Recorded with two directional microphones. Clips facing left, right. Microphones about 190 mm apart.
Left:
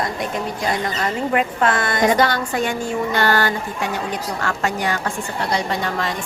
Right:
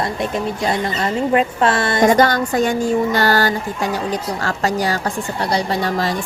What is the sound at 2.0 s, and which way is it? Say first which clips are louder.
A woman's voice: right 4 dB; 45° right (ahead or behind).